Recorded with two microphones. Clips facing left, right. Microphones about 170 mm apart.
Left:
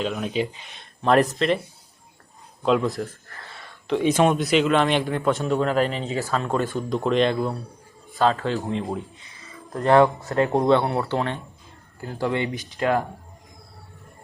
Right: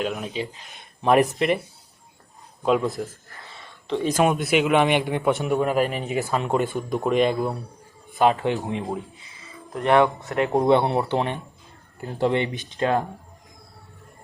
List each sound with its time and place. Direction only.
0.0 s speech: centre (ahead or behind)
1.0 s a man's voice: 15° right (ahead or behind)
3.0 s a man's voice: centre (ahead or behind); by 13.1 s 25° right (ahead or behind)